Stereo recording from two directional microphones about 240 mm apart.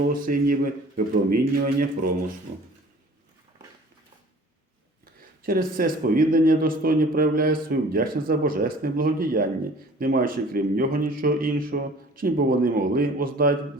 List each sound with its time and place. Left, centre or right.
0.2 s a man's voice: right
5.4 s a man's voice: right